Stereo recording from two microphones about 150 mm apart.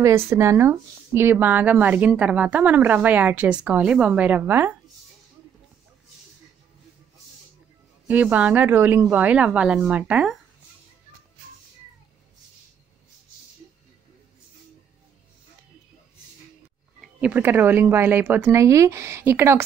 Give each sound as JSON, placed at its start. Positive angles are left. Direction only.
{"t": 0.0, "sound": "speech", "side_deg": -15}
{"t": 8.1, "sound": "speech", "side_deg": -10}
{"t": 17.0, "sound": "speech", "side_deg": -10}